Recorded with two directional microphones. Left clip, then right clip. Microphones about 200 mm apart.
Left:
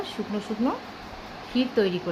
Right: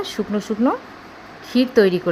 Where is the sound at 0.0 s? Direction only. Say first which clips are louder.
Right 7 dB; 30° right (ahead or behind).